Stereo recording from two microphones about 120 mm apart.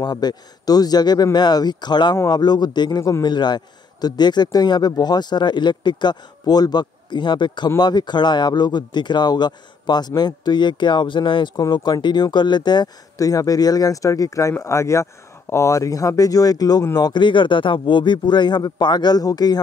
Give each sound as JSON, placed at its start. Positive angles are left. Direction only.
{"t": 0.0, "sound": "a man's voice", "side_deg": 35}